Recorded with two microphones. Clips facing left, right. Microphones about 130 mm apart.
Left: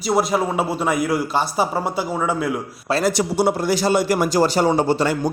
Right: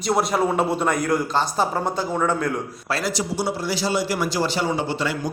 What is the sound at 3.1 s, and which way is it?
A man's voice, 60° left (ahead or behind).